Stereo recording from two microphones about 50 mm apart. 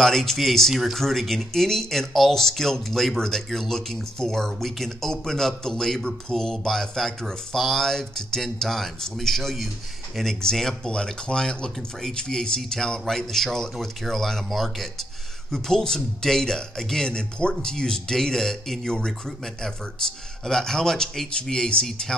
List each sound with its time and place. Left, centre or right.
0.0 s a man's voice: centre